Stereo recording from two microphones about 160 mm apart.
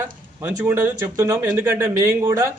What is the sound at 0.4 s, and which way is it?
A man's voice, 15° right (ahead or behind).